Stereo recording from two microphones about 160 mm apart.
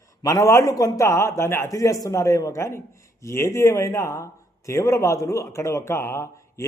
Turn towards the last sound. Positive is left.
turn(degrees=15)  # may be behind; listen again after turning